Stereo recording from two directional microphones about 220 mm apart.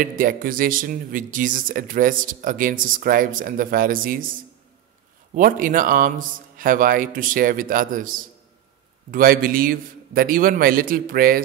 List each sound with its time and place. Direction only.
0.2 s speech: 40° right (ahead or behind)
5.3 s speech: 40° right (ahead or behind)